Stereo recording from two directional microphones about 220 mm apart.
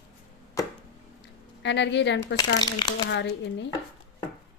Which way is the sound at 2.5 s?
20° left (ahead or behind).